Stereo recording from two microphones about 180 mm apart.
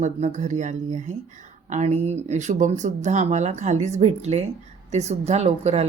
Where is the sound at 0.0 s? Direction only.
40° right (ahead or behind).